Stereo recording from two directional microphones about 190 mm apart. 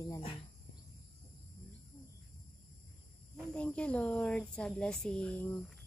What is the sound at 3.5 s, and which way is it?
Speech, 5° left (ahead or behind).